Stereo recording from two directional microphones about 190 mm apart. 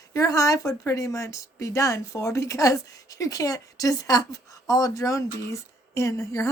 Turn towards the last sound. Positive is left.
turn(degrees=15)  # may be behind; listen again after turning